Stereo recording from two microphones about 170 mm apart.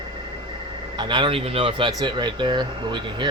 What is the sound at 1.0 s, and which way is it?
Speech, 30° right (ahead or behind).